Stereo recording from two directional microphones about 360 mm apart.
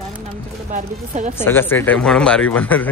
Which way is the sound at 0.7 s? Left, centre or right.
Right.